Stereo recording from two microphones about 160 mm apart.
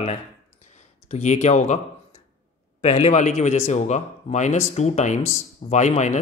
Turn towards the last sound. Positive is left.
turn(degrees=50)  # may be behind; listen again after turning